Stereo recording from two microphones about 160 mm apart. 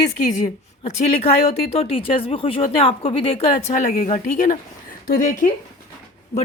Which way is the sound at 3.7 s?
50° left (ahead or behind).